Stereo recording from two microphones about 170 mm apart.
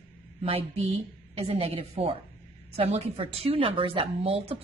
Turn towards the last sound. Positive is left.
turn(degrees=-35)  # may be behind; listen again after turning